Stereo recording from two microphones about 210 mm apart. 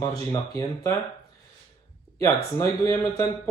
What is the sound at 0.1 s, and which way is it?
Speech, 15° left (ahead or behind).